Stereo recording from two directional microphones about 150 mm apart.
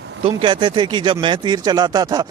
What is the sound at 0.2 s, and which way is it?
Speech, 35° right (ahead or behind).